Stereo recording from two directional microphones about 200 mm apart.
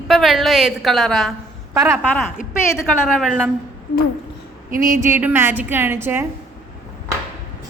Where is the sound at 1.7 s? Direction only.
15° right (ahead or behind).